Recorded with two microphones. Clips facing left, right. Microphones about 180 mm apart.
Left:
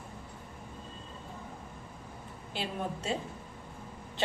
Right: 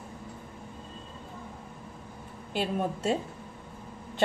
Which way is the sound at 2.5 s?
45° right (ahead or behind).